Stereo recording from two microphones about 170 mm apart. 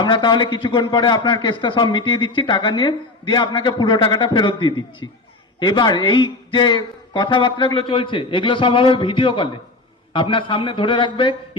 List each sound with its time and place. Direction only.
0.0 s a man's voice: 25° left (ahead or behind)